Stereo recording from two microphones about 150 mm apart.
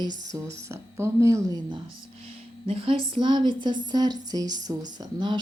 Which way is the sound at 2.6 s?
35° right (ahead or behind).